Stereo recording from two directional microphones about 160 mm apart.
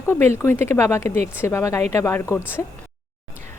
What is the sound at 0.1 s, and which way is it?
A woman's voice, 15° left (ahead or behind).